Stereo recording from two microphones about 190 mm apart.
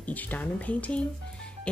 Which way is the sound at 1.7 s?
5° left (ahead or behind).